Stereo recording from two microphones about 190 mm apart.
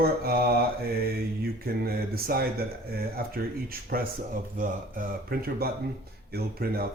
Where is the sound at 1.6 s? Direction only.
55° right (ahead or behind).